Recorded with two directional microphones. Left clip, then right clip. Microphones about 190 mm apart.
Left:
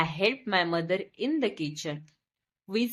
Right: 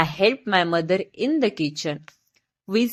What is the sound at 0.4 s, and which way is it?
A woman's voice, 30° right (ahead or behind).